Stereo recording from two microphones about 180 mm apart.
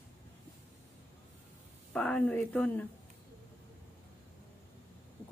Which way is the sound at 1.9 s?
5° left (ahead or behind).